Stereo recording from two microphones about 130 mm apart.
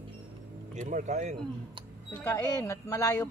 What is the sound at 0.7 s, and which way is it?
Speech, 75° right (ahead or behind).